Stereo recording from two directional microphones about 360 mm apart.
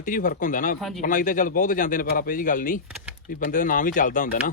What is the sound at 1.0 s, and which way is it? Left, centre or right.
Speech, left.